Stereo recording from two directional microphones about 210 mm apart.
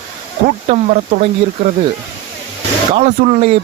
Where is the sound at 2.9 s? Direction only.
35° right (ahead or behind).